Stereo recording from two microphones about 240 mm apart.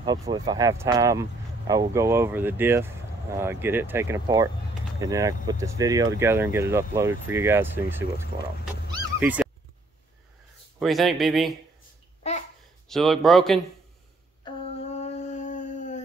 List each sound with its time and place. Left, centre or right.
0.0 s speech: centre
9.2 s speech: centre
10.8 s speech: centre
12.2 s a sound: left
12.8 s speech: centre
14.4 s a sound: left